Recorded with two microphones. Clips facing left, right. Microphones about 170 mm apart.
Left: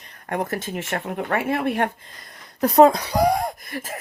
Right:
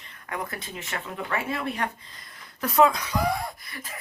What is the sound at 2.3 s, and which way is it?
Speech, 40° left (ahead or behind).